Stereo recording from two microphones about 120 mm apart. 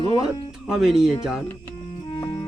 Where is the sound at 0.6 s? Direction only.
5° right (ahead or behind).